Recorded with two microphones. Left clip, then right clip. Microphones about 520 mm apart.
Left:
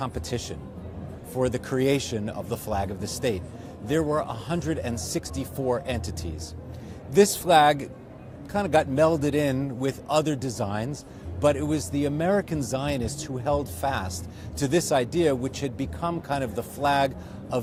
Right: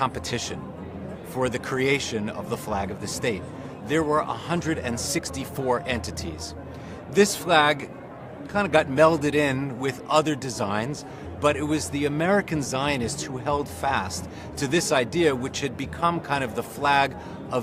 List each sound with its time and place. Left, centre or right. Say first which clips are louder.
0.0 s a man's voice: right 5 dB; left